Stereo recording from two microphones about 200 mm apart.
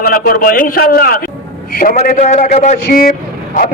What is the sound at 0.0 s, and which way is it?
A man's voice, 45° left (ahead or behind).